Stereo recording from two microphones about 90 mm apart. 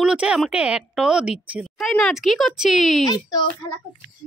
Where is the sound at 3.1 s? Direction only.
45° left (ahead or behind).